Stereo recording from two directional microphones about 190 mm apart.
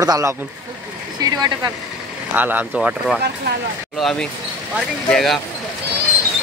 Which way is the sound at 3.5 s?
65° right (ahead or behind).